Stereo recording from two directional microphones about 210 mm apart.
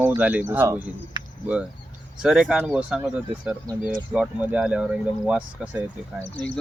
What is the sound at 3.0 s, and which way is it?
Speech, 15° right (ahead or behind).